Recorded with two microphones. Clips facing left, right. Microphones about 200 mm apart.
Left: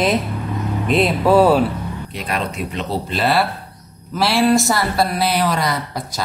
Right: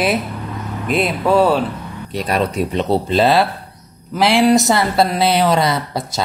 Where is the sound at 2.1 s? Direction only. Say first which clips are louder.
Right 7 dB; 40° right (ahead or behind).